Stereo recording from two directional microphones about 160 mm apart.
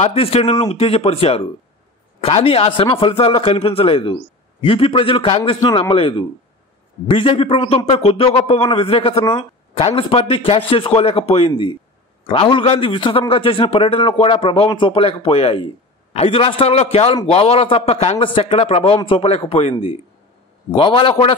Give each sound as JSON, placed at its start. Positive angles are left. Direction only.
{"t": 0.0, "sound": "a man's voice", "side_deg": 40}